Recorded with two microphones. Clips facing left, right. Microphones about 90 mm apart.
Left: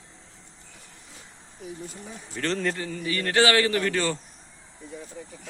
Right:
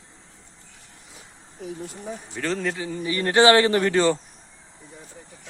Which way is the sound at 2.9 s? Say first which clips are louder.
Right 5 dB; 25° right (ahead or behind).